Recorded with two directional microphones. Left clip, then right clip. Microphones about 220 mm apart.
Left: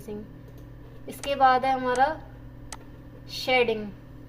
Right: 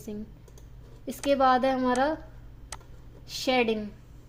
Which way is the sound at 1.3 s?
50° right (ahead or behind).